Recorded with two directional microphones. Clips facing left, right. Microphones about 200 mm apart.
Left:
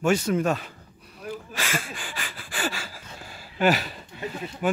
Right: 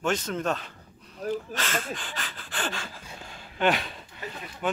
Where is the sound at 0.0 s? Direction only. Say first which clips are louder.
Left 5 dB; 10° left (ahead or behind).